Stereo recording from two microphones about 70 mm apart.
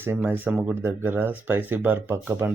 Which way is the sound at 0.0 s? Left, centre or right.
Right.